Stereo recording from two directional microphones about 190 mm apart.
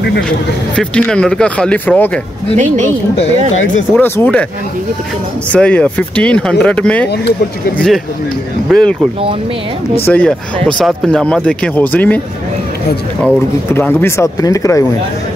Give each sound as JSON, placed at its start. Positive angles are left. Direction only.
{"t": 0.7, "sound": "speech", "side_deg": 5}
{"t": 2.5, "sound": "a woman's voice", "side_deg": -40}
{"t": 3.9, "sound": "speech", "side_deg": 10}
{"t": 5.5, "sound": "speech", "side_deg": 5}
{"t": 8.6, "sound": "speech", "side_deg": 0}
{"t": 10.0, "sound": "speech", "side_deg": 5}
{"t": 13.2, "sound": "speech", "side_deg": 10}